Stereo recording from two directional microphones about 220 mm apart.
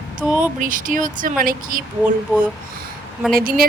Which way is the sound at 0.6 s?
40° right (ahead or behind).